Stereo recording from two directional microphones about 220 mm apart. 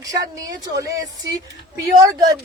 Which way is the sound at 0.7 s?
15° right (ahead or behind).